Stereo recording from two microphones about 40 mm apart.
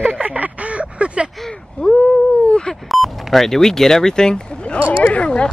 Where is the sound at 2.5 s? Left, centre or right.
Left.